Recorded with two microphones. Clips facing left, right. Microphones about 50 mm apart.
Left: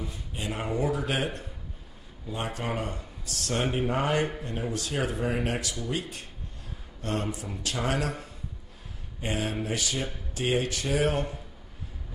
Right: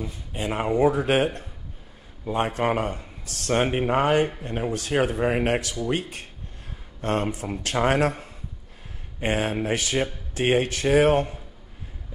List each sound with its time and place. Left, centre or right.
0.3 s speech: right